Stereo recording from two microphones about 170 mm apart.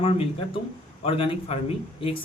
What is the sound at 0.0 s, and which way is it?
A man's voice, 35° left (ahead or behind).